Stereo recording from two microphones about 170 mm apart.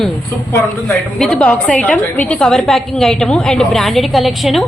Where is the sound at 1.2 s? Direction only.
5° left (ahead or behind).